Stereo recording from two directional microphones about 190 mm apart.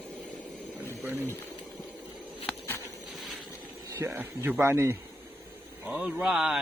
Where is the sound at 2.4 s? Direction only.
10° left (ahead or behind).